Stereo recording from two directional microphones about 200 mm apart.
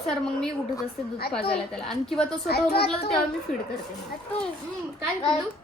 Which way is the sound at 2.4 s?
50° left (ahead or behind).